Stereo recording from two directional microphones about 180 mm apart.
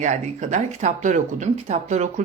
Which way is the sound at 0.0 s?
40° right (ahead or behind).